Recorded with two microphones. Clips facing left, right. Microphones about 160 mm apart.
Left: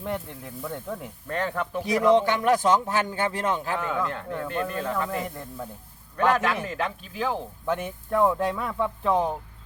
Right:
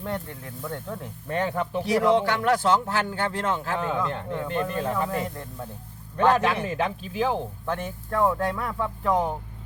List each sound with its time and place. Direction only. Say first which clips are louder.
0.0 s speech: even; 5° left (ahead or behind)
1.3 s speech: right 2 dB; 15° right (ahead or behind)
2.1 s speech: left 1 dB; 20° left (ahead or behind)
3.8 s speech: right 1 dB; 20° right (ahead or behind)
5.1 s speech: right 1 dB; centre (ahead or behind)
6.1 s speech: right 2 dB; 25° right (ahead or behind)
7.6 s speech: left 2 dB; 15° left (ahead or behind)